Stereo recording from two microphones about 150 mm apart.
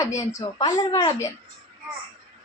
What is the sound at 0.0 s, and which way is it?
A woman's voice, 20° left (ahead or behind).